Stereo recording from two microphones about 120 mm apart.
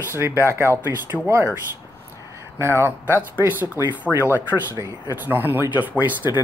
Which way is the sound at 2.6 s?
20° right (ahead or behind).